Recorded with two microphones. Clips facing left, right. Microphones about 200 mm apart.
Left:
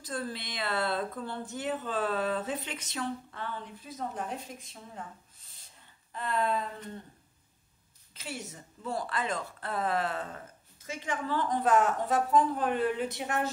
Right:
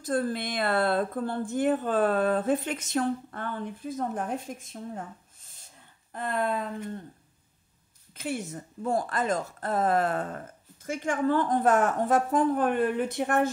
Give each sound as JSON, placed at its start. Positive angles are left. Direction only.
{"t": 0.0, "sound": "speech", "side_deg": -50}
{"t": 6.1, "sound": "speech", "side_deg": -50}
{"t": 8.1, "sound": "speech", "side_deg": -55}